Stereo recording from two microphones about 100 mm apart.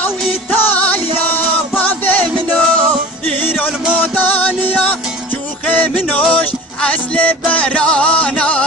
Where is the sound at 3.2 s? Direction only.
20° left (ahead or behind).